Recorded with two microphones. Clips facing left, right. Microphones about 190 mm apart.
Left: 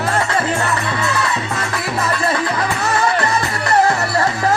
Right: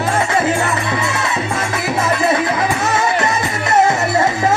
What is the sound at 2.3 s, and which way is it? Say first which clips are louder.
Music: right 3 dB; 20° right (ahead or behind).